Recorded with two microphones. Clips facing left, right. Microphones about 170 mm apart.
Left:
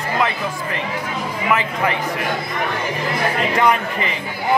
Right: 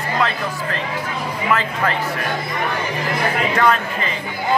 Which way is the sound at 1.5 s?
15° left (ahead or behind).